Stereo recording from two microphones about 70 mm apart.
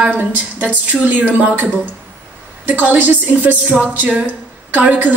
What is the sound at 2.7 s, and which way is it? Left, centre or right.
A woman's voice, right.